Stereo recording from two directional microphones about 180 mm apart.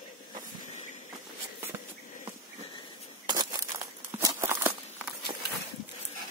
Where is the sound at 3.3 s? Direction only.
20° right (ahead or behind).